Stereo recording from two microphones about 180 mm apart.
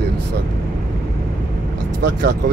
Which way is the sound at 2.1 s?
65° right (ahead or behind).